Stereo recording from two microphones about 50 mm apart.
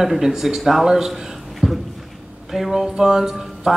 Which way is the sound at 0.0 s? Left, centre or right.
Centre.